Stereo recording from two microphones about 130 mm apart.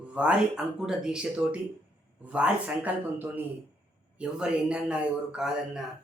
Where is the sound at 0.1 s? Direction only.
10° right (ahead or behind).